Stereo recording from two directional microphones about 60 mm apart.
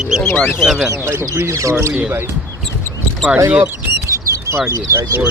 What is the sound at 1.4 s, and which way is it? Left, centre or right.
Speech, right.